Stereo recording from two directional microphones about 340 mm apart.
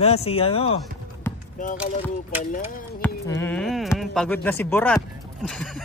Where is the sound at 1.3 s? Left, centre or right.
Centre.